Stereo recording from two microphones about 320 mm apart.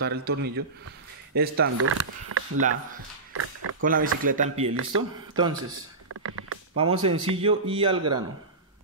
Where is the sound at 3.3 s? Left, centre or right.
Right.